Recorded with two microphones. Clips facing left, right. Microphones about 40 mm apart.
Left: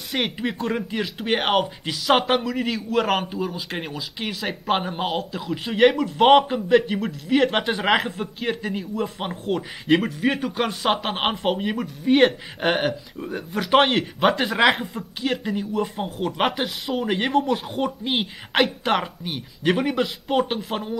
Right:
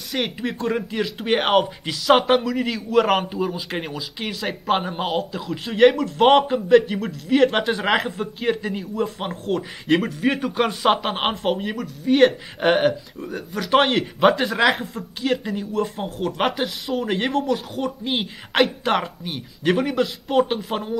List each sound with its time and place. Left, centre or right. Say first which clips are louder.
0.1 s speech: even; centre
11.5 s speech: left 1 dB; centre
12.5 s speech: right 4 dB; centre
13.3 s speech: even; centre
17.5 s speech: even; centre